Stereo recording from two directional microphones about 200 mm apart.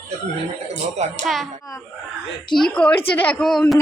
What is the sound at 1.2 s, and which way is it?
Speech, centre (ahead or behind).